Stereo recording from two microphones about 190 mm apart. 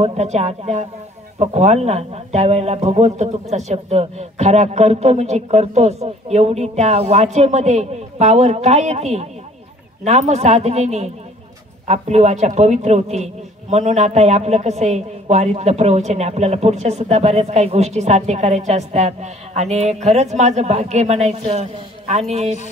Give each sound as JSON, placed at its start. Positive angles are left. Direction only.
{"t": 0.0, "sound": "a man's voice", "side_deg": -35}